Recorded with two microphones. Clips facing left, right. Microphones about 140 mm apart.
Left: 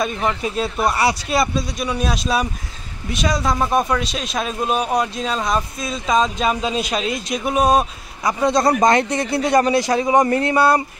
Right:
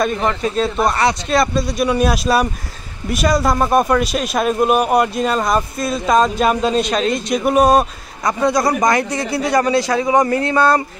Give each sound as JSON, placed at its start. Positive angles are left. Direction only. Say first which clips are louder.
{"t": 0.0, "sound": "speech", "louder": "right 3 dB", "side_deg": 5}
{"t": 8.5, "sound": "a man's voice", "louder": "left 1 dB", "side_deg": 25}
{"t": 10.5, "sound": "speech", "louder": "right 2 dB", "side_deg": 10}